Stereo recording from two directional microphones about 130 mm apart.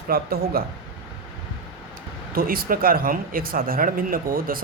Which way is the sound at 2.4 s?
90° right.